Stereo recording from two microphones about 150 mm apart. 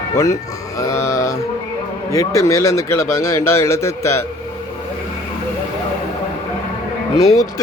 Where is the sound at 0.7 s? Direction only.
20° left (ahead or behind).